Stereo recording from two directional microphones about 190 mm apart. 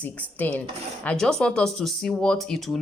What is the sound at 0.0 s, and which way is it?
Speech, 10° left (ahead or behind).